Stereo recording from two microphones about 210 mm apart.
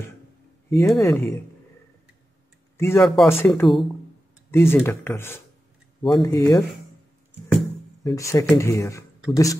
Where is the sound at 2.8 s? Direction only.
10° left (ahead or behind).